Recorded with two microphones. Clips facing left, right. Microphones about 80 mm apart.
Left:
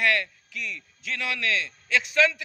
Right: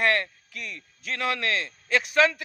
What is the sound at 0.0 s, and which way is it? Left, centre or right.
A man's voice, right.